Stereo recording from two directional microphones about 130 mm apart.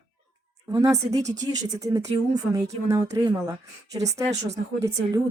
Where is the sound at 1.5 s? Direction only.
30° right (ahead or behind).